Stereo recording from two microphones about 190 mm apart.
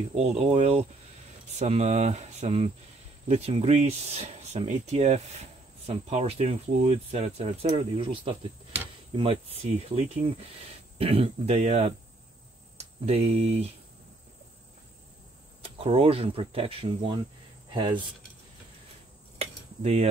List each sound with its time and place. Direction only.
0.1 s speech: 35° right (ahead or behind)
15.8 s speech: 30° right (ahead or behind)
19.3 s a sound: 35° right (ahead or behind)